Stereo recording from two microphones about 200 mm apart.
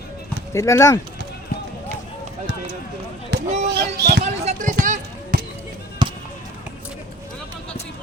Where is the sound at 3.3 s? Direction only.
55° right (ahead or behind).